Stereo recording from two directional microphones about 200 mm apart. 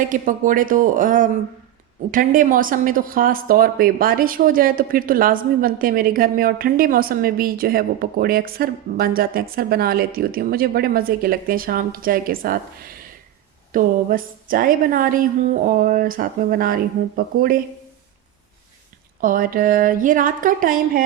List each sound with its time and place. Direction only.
0.1 s speech: 40° right (ahead or behind)
19.2 s speech: 45° right (ahead or behind)